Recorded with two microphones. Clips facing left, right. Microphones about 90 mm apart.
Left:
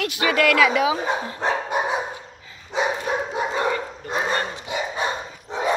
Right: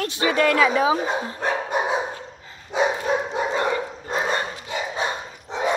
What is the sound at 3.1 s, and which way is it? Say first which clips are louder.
Dog: right 1 dB; 5° left (ahead or behind).